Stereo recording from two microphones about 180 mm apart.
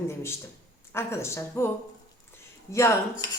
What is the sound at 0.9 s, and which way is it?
Speech, 15° left (ahead or behind).